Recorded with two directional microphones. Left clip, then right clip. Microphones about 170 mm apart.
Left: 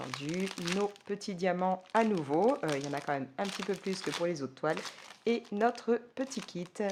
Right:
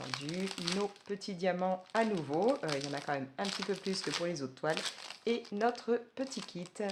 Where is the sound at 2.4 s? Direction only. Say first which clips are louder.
Left 2 dB; 30° left (ahead or behind).